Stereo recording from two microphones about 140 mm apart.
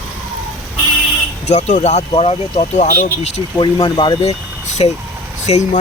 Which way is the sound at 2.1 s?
45° left (ahead or behind).